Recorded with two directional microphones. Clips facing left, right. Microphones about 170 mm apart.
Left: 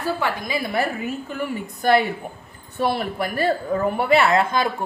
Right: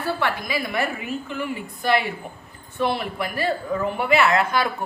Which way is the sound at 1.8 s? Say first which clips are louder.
Left 4 dB; 45° left (ahead or behind).